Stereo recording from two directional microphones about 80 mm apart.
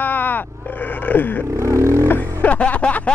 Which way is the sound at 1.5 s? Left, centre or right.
Right.